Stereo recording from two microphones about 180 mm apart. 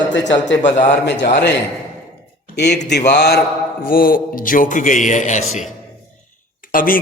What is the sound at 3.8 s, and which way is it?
A man's voice, 55° left (ahead or behind).